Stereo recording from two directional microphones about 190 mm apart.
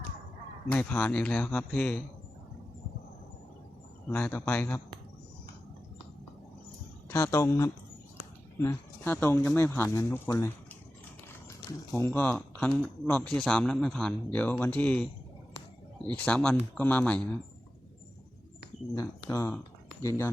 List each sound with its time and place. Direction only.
0.7 s speech: 10° left (ahead or behind)
4.1 s speech: 10° left (ahead or behind)
7.1 s speech: 15° left (ahead or behind)
11.9 s speech: 15° left (ahead or behind)
16.2 s speech: 5° left (ahead or behind)
18.9 s speech: 15° left (ahead or behind)